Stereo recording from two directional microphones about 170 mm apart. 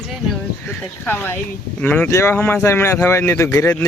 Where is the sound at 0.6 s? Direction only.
10° left (ahead or behind).